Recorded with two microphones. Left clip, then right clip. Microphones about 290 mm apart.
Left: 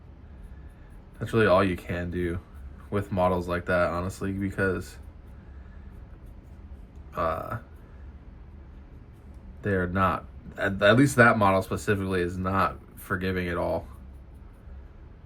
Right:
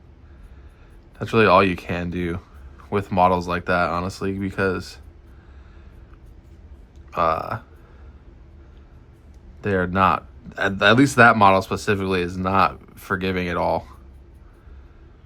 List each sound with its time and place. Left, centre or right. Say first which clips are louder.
1.2 s speech: right 6 dB; centre
7.1 s speech: right 8 dB; centre
9.7 s speech: right 7 dB; centre